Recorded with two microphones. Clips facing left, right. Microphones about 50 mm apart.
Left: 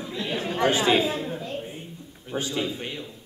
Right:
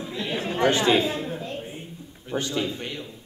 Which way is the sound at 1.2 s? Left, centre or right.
Centre.